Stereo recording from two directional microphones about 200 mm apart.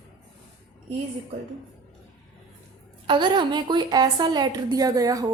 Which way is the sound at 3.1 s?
25° right (ahead or behind).